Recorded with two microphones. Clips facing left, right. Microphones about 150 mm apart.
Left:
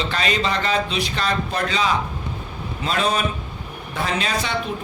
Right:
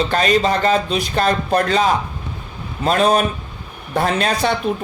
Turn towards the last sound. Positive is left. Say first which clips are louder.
# right 6 dB
turn(degrees=-50)  # may be behind; listen again after turning